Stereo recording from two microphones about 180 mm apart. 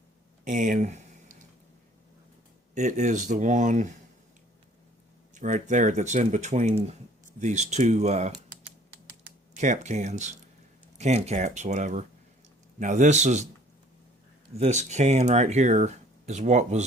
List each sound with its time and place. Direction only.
0.4 s speech: 45° right (ahead or behind)
2.7 s speech: 40° right (ahead or behind)
5.3 s speech: 45° right (ahead or behind)
9.6 s speech: 45° right (ahead or behind)
14.6 s speech: 40° right (ahead or behind)